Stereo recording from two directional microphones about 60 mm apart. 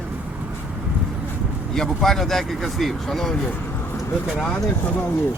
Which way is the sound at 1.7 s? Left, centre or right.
Centre.